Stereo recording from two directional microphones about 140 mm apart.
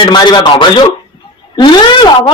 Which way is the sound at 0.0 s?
35° left (ahead or behind).